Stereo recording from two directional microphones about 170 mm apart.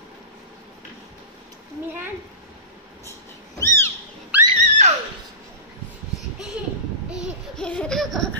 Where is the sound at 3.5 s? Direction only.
15° left (ahead or behind).